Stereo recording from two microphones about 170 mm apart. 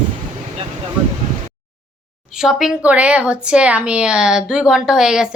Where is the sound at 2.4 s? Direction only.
Centre (ahead or behind).